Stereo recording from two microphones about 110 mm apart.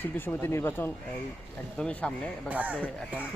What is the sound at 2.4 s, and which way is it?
Speech, 15° right (ahead or behind).